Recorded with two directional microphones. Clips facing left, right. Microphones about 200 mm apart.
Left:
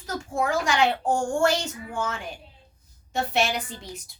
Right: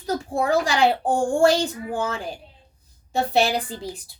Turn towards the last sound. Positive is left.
turn(degrees=-30)  # may be behind; listen again after turning